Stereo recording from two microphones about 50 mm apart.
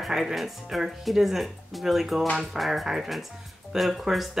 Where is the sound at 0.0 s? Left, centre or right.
Centre.